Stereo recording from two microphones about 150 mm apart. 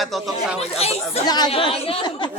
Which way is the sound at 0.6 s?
40° left (ahead or behind).